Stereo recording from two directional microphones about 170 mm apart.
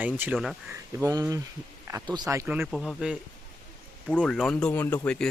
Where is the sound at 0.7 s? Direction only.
20° right (ahead or behind).